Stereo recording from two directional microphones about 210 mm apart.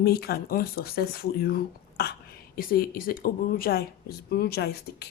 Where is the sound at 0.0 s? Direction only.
45° left (ahead or behind).